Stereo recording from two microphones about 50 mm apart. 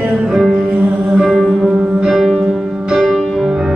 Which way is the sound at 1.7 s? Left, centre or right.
Centre.